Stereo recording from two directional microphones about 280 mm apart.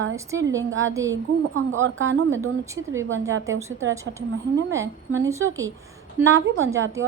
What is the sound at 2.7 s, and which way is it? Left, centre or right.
A woman's voice, centre.